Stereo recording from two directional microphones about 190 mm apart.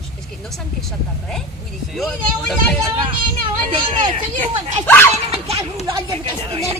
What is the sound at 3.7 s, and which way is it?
Speech, 25° right (ahead or behind).